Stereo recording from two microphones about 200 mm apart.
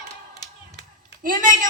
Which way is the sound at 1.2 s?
45° right (ahead or behind).